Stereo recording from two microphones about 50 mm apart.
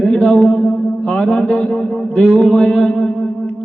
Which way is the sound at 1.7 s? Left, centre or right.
Centre.